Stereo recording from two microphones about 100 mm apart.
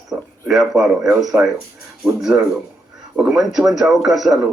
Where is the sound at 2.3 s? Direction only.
15° right (ahead or behind).